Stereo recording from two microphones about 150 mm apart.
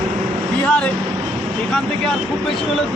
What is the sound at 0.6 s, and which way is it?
Speech, 10° left (ahead or behind).